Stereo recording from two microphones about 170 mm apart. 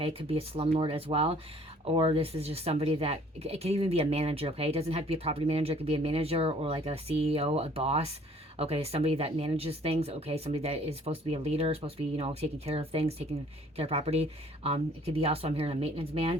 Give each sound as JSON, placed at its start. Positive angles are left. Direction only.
{"t": 0.0, "sound": "speech", "side_deg": -35}